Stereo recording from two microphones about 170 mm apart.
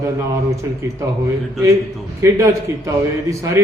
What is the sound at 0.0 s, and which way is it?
A man's voice, 20° right (ahead or behind).